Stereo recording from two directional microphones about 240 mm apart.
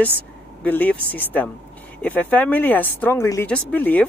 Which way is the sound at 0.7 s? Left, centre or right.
Centre.